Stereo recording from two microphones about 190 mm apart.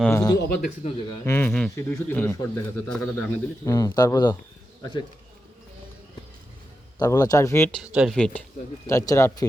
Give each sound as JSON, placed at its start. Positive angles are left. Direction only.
{"t": 0.0, "sound": "speech", "side_deg": 15}
{"t": 0.3, "sound": "a man's voice", "side_deg": 55}
{"t": 1.2, "sound": "speech", "side_deg": 10}
{"t": 3.7, "sound": "speech", "side_deg": 20}
{"t": 7.0, "sound": "speech", "side_deg": 20}
{"t": 7.8, "sound": "speech", "side_deg": 0}
{"t": 8.9, "sound": "speech", "side_deg": 15}